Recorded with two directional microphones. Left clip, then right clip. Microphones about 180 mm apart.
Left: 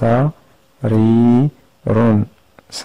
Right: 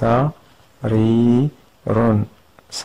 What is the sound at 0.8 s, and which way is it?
Speech, 35° left (ahead or behind).